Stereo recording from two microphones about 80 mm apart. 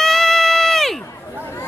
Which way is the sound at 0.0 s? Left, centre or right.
Centre.